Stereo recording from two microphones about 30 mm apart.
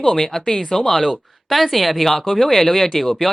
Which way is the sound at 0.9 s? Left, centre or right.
Centre.